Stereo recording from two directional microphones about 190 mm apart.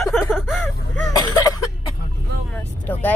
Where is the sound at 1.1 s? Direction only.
20° left (ahead or behind).